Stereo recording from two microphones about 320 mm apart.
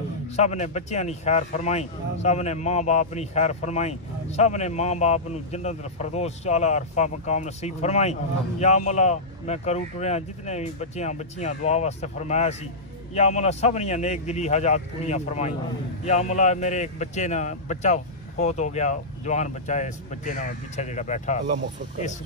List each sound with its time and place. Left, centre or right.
0.4 s a man's voice: left